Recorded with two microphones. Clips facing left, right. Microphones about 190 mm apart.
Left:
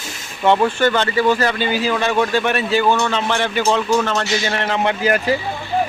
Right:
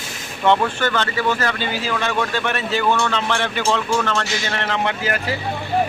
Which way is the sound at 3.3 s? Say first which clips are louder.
Left 5 dB; 5° left (ahead or behind).